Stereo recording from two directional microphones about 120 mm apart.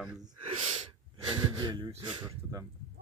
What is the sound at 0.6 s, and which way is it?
Sneeze, 65° right (ahead or behind).